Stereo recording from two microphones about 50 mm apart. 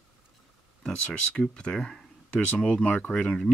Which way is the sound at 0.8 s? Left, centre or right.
Centre.